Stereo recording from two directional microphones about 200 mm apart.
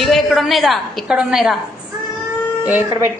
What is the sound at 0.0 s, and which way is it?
A woman's voice, centre (ahead or behind).